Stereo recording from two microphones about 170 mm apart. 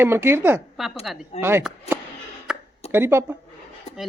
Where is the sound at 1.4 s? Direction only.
15° right (ahead or behind).